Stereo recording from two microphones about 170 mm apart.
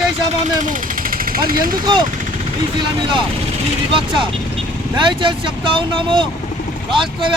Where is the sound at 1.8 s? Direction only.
25° right (ahead or behind).